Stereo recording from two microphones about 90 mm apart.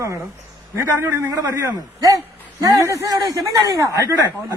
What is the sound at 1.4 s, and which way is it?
A man's voice, 40° right (ahead or behind).